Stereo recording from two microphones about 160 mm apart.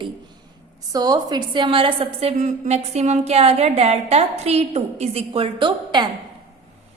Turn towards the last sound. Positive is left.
turn(degrees=-30)  # may be behind; listen again after turning